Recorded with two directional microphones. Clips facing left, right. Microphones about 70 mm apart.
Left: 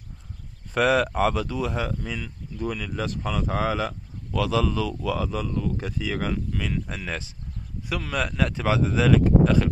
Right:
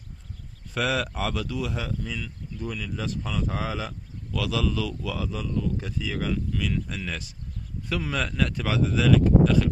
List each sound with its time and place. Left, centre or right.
0.7 s speech: left
1.3 s speech: left
1.7 s speech: left
4.3 s speech: left
5.0 s speech: left
6.5 s speech: left
8.1 s speech: centre
8.4 s speech: left